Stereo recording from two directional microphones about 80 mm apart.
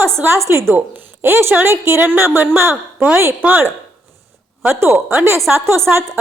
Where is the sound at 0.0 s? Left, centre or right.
Right.